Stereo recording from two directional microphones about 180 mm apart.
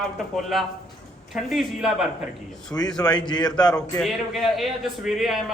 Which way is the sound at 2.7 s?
15° left (ahead or behind).